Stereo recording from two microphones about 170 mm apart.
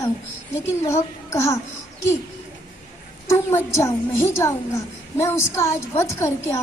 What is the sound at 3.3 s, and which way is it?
A woman's voice, 15° left (ahead or behind).